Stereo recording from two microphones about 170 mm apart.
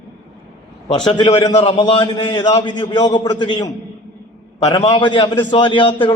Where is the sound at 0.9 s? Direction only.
25° left (ahead or behind).